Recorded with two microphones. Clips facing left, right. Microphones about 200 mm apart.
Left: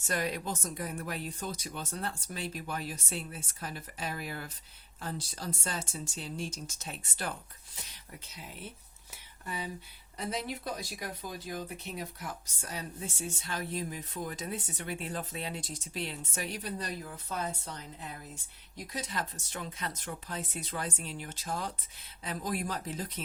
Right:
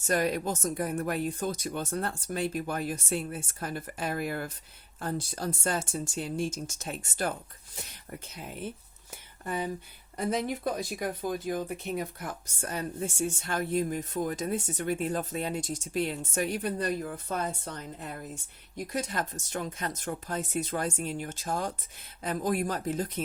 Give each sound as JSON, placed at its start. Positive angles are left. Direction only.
{"t": 0.1, "sound": "speech", "side_deg": -45}